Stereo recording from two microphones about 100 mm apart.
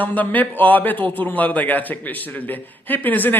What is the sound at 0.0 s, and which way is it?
A man's voice, 15° left (ahead or behind).